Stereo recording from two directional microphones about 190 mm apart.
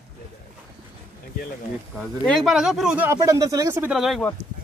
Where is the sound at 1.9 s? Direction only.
Centre (ahead or behind).